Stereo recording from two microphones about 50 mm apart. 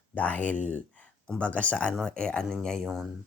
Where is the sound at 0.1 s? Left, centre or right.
Left; by 2.6 s centre.